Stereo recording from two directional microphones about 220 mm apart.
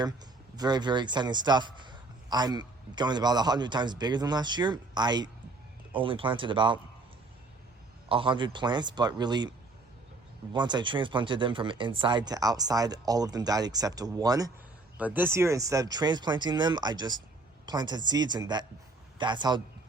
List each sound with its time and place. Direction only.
0.5 s a man's voice: 20° right (ahead or behind)
8.1 s a man's voice: 25° right (ahead or behind)
10.5 s a man's voice: 20° right (ahead or behind)